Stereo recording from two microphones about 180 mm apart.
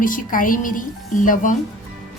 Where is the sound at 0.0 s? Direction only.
50° left (ahead or behind).